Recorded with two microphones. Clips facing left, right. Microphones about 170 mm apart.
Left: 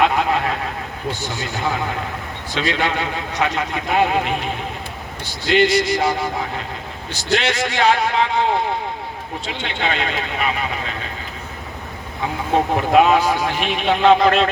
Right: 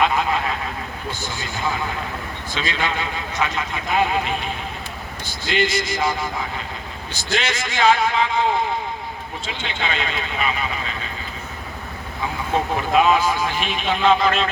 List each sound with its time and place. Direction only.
0.0 s vehicle: 60° left (ahead or behind)
1.2 s a man's voice: 70° left (ahead or behind)
12.7 s a man's voice: 60° left (ahead or behind)